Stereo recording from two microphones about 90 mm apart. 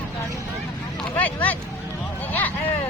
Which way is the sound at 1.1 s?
20° left (ahead or behind).